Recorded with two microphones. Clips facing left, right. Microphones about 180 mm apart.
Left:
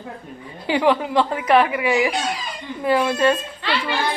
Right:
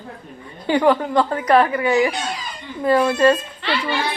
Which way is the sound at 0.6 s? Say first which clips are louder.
Right 2 dB; 5° left (ahead or behind).